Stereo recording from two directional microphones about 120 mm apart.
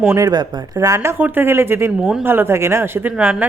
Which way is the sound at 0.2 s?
30° right (ahead or behind).